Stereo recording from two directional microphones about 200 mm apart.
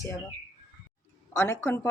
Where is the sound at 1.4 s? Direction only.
15° left (ahead or behind).